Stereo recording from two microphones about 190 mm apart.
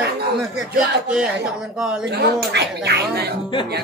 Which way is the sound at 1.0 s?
5° right (ahead or behind).